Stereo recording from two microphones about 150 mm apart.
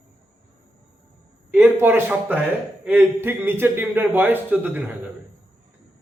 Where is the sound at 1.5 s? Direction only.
15° right (ahead or behind).